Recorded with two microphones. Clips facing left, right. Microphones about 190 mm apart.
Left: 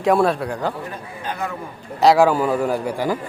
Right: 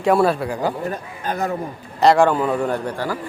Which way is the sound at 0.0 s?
Centre (ahead or behind).